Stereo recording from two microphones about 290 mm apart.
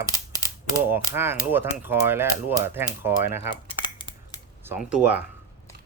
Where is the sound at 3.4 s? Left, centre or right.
Centre.